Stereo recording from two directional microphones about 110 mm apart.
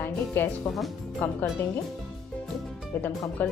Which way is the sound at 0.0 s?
20° left (ahead or behind).